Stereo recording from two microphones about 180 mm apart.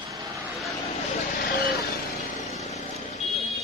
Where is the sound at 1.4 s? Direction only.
60° left (ahead or behind).